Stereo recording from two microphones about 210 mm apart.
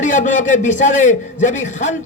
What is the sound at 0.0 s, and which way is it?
A man's voice, 35° left (ahead or behind).